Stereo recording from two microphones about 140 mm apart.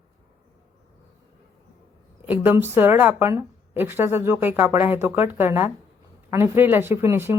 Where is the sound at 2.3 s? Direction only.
15° right (ahead or behind).